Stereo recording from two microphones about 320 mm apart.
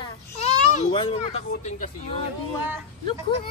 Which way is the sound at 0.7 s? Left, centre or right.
Centre.